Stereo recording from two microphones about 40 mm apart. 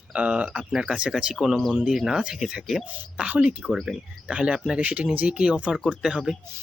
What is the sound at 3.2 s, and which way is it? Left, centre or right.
Speech, right.